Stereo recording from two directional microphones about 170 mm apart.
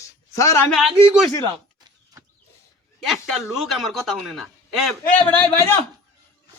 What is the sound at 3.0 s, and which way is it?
A man's voice, centre (ahead or behind).